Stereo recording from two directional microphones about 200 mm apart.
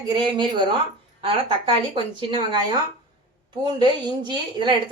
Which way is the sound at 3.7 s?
20° right (ahead or behind).